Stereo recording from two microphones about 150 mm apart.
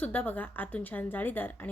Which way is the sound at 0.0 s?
10° left (ahead or behind).